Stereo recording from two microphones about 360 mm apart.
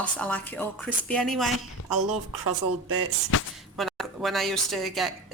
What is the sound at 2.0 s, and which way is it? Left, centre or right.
Speech, right.